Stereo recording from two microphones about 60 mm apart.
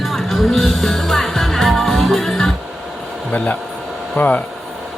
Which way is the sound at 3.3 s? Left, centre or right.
Left.